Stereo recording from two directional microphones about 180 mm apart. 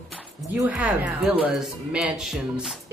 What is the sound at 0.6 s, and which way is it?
A woman's voice, 10° right (ahead or behind).